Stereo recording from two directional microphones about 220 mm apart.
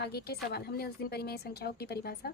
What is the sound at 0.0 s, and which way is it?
A woman's voice, 45° left (ahead or behind).